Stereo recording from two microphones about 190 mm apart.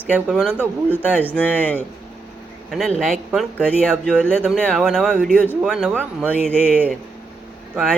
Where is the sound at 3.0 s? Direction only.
Centre (ahead or behind).